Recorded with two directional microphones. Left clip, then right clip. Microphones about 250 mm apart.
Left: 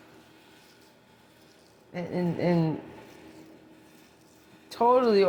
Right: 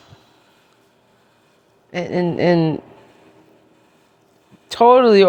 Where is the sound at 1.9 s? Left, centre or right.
Right.